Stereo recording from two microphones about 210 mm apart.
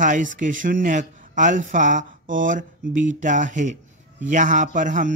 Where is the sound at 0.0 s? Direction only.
35° right (ahead or behind).